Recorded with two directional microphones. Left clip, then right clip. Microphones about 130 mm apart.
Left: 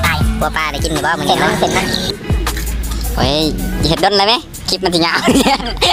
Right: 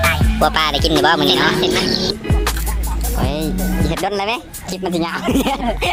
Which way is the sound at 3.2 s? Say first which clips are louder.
Left 8 dB; centre (ahead or behind).